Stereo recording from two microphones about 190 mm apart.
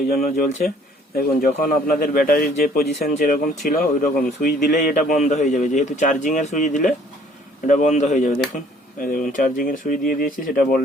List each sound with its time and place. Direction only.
0.1 s a man's voice: 50° left (ahead or behind)